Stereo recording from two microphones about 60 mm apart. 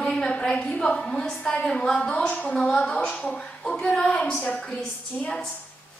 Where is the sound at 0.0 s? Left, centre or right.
Centre.